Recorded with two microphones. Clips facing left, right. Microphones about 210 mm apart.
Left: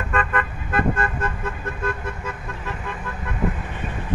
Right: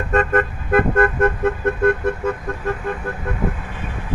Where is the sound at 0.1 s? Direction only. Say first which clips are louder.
Right 8 dB; 45° right (ahead or behind).